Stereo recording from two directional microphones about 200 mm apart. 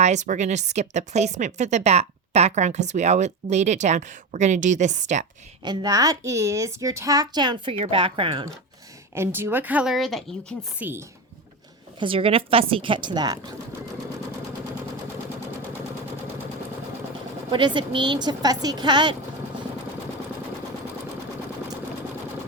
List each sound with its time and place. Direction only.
0.0 s a woman's voice: 35° right (ahead or behind)
5.6 s a woman's voice: 20° right (ahead or behind)
9.1 s a woman's voice: 10° right (ahead or behind)
10.8 s a woman's voice: 10° right (ahead or behind)
11.9 s a woman's voice: 25° right (ahead or behind)
17.5 s a woman's voice: 25° right (ahead or behind)